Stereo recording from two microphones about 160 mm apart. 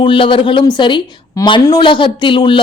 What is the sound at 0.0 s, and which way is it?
Speech, 35° left (ahead or behind).